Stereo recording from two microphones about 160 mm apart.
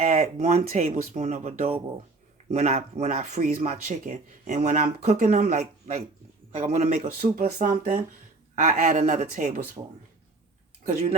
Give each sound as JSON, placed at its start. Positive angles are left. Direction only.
{"t": 0.1, "sound": "speech", "side_deg": -50}
{"t": 7.2, "sound": "speech", "side_deg": -75}
{"t": 9.8, "sound": "speech", "side_deg": -30}
{"t": 10.8, "sound": "speech", "side_deg": -45}